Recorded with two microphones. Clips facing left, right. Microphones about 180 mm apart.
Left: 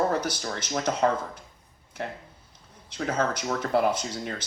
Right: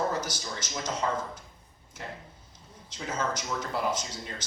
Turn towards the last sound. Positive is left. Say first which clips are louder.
# left 5 dB
turn(degrees=60)  # may be behind; listen again after turning